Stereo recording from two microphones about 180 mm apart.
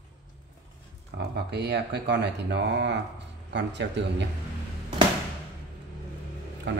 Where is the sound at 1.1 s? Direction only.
65° right (ahead or behind).